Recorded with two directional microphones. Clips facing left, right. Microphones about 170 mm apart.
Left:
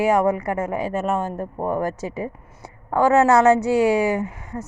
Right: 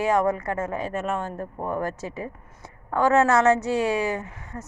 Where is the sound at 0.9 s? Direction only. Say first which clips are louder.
Left 5 dB; 40° left (ahead or behind).